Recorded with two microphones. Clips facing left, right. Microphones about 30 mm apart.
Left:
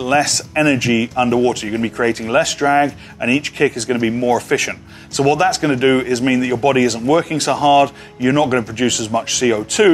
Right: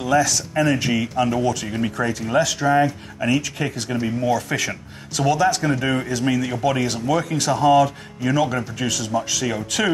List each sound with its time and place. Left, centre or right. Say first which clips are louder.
0.0 s speech: left 3 dB; left